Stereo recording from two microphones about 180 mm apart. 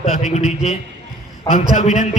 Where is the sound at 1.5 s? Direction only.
40° left (ahead or behind).